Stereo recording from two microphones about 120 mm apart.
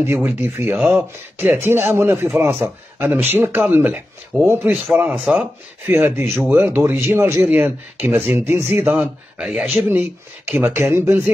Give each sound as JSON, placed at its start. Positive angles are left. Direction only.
{"t": 0.0, "sound": "a man's voice", "side_deg": -15}
{"t": 5.9, "sound": "a man's voice", "side_deg": -20}